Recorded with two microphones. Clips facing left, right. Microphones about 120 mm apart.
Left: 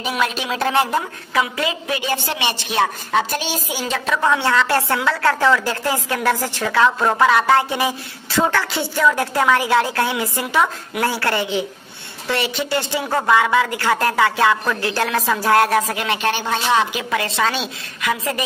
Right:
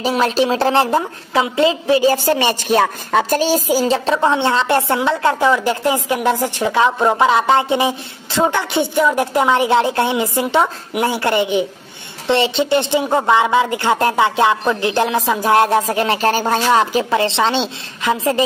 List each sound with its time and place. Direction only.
0.0 s a woman's voice: 30° right (ahead or behind)